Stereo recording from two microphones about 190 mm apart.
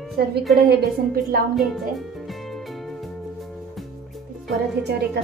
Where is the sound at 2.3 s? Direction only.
Centre (ahead or behind).